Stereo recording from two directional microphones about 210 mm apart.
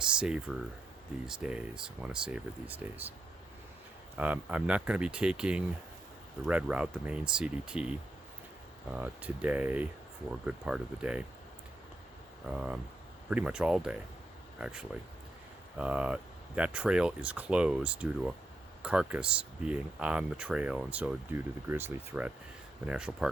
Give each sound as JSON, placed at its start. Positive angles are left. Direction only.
{"t": 0.2, "sound": "speech", "side_deg": -5}
{"t": 4.2, "sound": "speech", "side_deg": -5}
{"t": 12.5, "sound": "speech", "side_deg": -5}